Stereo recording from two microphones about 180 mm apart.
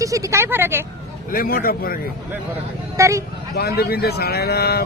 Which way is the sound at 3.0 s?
15° right (ahead or behind).